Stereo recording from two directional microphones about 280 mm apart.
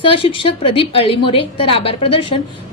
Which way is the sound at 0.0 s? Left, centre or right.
Centre.